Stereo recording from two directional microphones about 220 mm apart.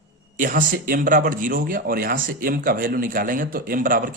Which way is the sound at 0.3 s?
40° right (ahead or behind).